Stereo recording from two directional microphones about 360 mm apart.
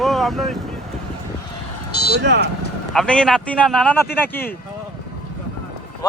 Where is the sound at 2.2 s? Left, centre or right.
Right.